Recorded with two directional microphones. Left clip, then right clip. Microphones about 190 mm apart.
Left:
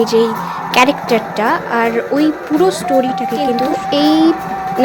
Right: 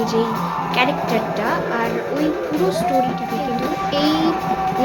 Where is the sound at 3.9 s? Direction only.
40° left (ahead or behind).